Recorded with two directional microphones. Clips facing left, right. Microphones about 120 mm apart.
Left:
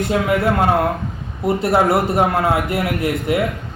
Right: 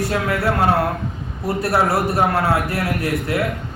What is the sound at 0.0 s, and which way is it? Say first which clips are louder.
Speech: left 3 dB; 20° left (ahead or behind).